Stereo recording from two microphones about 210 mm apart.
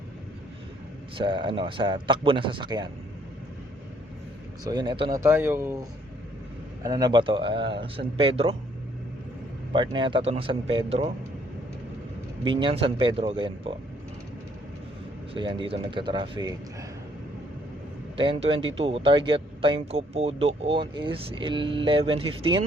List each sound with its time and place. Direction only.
1.1 s speech: 20° right (ahead or behind)
4.6 s speech: 20° right (ahead or behind)
6.8 s speech: 20° right (ahead or behind)
9.7 s speech: 25° right (ahead or behind)
12.5 s speech: 25° right (ahead or behind)
15.3 s speech: 25° right (ahead or behind)
18.2 s speech: 25° right (ahead or behind)